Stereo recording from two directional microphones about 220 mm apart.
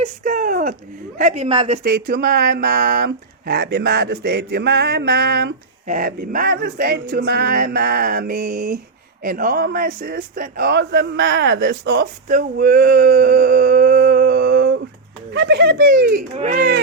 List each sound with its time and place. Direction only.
0.0 s a sound: 35° right (ahead or behind)
1.2 s a woman's voice: 30° right (ahead or behind)
1.8 s speech: 40° right (ahead or behind)